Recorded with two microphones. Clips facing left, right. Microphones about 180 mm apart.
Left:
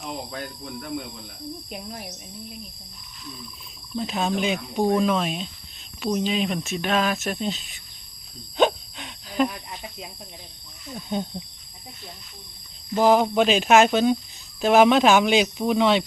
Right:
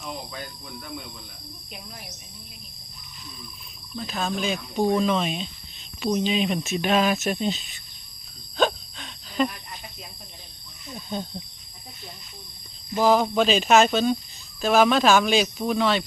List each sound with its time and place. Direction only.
3.9 s speech: 20° left (ahead or behind); by 7.6 s centre (ahead or behind)
8.5 s wheeze: 15° left (ahead or behind)
10.9 s speech: 15° left (ahead or behind)
13.0 s speech: 15° left (ahead or behind)